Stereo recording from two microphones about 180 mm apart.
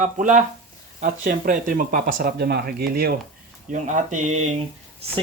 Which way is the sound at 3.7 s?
45° right (ahead or behind).